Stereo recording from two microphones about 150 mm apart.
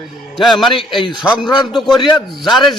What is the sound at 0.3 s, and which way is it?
Speech, centre (ahead or behind).